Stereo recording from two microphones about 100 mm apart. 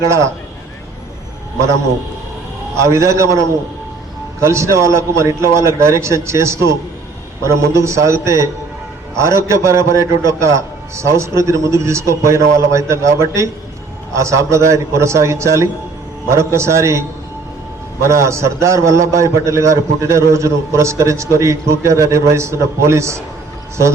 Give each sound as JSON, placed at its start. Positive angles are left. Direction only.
{"t": 0.0, "sound": "a man's voice", "side_deg": -30}
{"t": 2.7, "sound": "a man's voice", "side_deg": -30}
{"t": 18.0, "sound": "a man's voice", "side_deg": -30}